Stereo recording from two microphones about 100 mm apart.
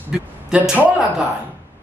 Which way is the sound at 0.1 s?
10° right (ahead or behind).